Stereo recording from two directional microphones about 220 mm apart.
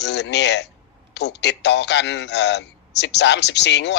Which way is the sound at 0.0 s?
50° left (ahead or behind).